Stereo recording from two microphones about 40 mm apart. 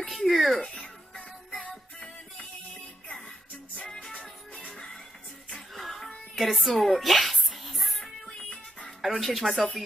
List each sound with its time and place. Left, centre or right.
0.1 s speech: centre
3.8 s music: centre
5.5 s music: centre
8.5 s music: left
9.0 s speech: centre